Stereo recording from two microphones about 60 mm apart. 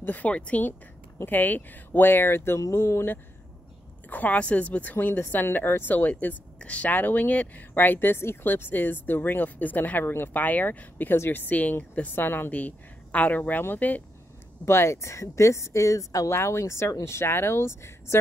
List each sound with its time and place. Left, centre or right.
0.0 s a woman's voice: left
4.1 s a woman's voice: left
12.4 s a woman's voice: left
14.6 s speech: left
16.3 s speech: left